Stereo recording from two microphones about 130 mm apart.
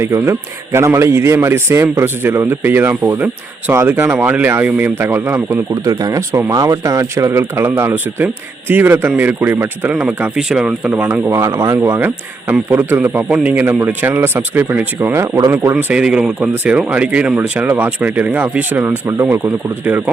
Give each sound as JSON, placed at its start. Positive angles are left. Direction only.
{"t": 0.0, "sound": "a man's voice", "side_deg": -20}
{"t": 5.7, "sound": "a man's voice", "side_deg": -30}
{"t": 15.7, "sound": "speech", "side_deg": -10}